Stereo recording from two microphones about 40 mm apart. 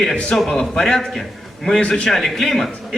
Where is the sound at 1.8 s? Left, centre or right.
Left.